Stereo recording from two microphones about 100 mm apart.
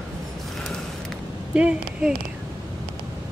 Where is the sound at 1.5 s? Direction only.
10° right (ahead or behind).